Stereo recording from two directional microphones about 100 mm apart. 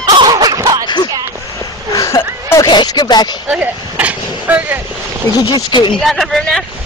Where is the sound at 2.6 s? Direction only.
45° left (ahead or behind).